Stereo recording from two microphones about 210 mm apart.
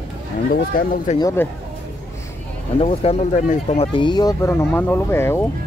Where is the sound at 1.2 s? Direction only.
10° left (ahead or behind).